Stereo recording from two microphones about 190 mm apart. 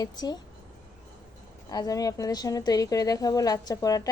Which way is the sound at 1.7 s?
20° left (ahead or behind).